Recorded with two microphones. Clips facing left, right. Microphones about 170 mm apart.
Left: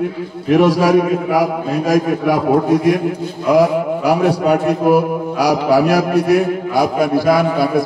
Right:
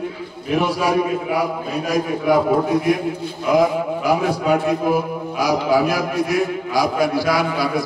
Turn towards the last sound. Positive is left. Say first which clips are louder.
# left 5 dB
turn(degrees=55)  # may be behind; listen again after turning